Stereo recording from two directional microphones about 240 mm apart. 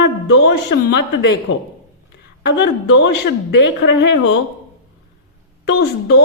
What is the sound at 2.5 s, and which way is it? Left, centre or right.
A woman's voice, left.